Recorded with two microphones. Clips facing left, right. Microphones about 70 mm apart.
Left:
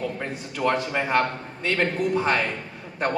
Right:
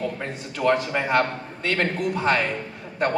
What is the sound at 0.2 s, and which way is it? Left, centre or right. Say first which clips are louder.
A man's voice: right 1 dB; centre.